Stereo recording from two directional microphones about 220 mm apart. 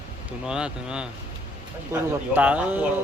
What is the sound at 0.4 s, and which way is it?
Speech, 5° right (ahead or behind).